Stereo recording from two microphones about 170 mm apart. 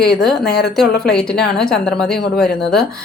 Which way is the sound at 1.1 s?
5° left (ahead or behind).